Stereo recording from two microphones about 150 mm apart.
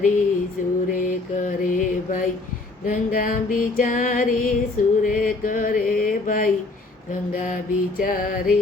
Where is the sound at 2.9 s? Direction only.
65° left (ahead or behind).